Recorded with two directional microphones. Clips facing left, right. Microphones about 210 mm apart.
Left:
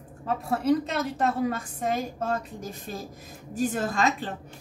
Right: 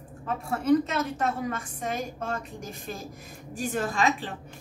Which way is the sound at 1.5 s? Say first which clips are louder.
Left 3 dB; 35° left (ahead or behind).